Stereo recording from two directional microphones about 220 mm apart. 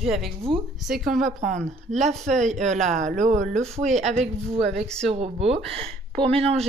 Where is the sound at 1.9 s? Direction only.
30° right (ahead or behind).